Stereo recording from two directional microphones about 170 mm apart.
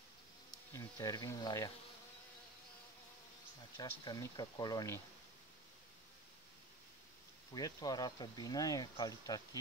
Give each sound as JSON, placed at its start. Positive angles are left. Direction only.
{"t": 0.5, "sound": "speech", "side_deg": 20}
{"t": 4.0, "sound": "speech", "side_deg": 25}
{"t": 7.5, "sound": "speech", "side_deg": 20}